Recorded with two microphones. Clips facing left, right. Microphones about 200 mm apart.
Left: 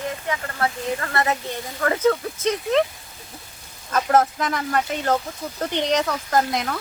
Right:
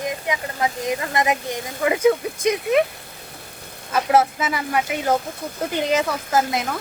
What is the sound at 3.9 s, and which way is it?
Speech, 10° right (ahead or behind).